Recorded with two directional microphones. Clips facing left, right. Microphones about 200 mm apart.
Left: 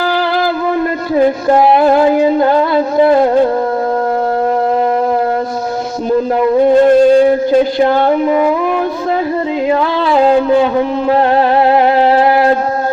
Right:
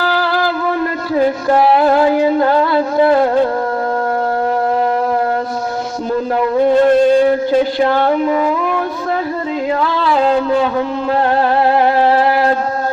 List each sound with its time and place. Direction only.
0.0 s music: 20° left (ahead or behind)
6.1 s a sound: 20° left (ahead or behind)
9.6 s music: 25° left (ahead or behind)